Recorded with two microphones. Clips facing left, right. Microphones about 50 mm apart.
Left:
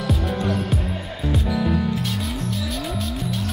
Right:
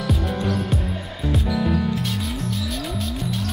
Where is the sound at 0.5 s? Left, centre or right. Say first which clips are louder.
Even; centre.